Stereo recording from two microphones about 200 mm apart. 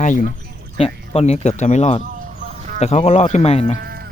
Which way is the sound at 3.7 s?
50° right (ahead or behind).